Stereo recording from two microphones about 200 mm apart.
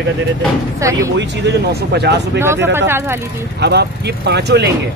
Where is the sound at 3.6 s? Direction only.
55° right (ahead or behind).